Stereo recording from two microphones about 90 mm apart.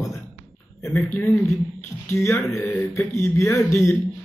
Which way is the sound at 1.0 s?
25° left (ahead or behind).